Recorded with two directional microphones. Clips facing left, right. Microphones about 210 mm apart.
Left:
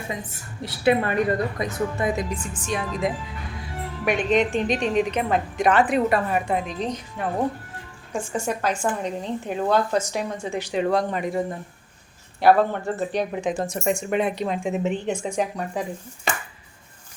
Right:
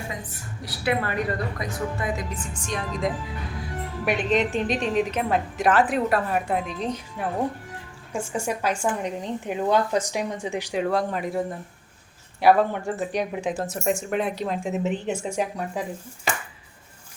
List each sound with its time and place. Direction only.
0.6 s a woman's voice: 25° left (ahead or behind)
2.3 s a woman's voice: 5° left (ahead or behind); by 10.8 s 15° right (ahead or behind)
10.8 s a woman's voice: centre (ahead or behind)